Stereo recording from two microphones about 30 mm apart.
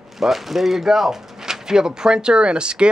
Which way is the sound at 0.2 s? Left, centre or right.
Centre.